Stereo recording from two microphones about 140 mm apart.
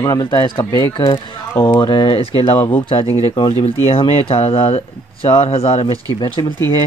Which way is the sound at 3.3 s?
35° left (ahead or behind).